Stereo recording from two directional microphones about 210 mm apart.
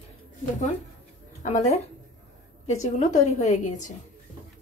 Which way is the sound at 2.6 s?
35° left (ahead or behind).